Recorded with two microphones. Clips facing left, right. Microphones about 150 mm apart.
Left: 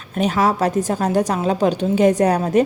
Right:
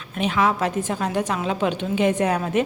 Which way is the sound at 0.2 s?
40° left (ahead or behind).